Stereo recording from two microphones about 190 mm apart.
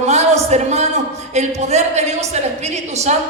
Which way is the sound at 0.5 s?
35° right (ahead or behind).